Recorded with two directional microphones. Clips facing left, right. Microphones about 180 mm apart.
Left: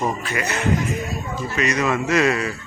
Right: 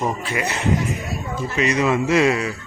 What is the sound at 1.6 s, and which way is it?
Speech, 20° right (ahead or behind).